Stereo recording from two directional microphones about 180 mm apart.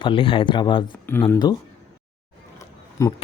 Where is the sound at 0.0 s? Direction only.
30° left (ahead or behind).